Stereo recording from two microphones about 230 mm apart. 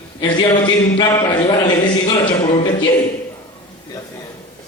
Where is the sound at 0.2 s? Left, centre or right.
Centre.